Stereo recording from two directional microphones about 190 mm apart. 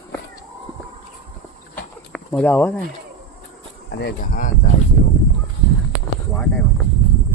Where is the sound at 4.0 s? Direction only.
55° left (ahead or behind).